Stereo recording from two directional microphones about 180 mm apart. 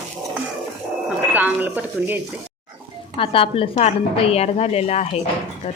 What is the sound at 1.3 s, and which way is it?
Speech, 10° right (ahead or behind).